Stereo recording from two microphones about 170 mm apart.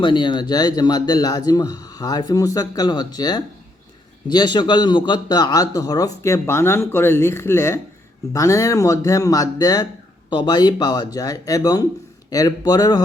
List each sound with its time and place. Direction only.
0.0 s a man's voice: 30° left (ahead or behind)